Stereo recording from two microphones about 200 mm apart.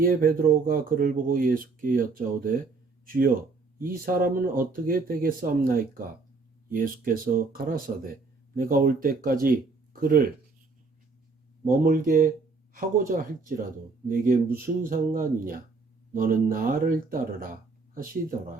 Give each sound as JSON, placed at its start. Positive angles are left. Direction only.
{"t": 0.0, "sound": "speech", "side_deg": -45}
{"t": 3.8, "sound": "speech", "side_deg": -45}
{"t": 11.9, "sound": "speech", "side_deg": -45}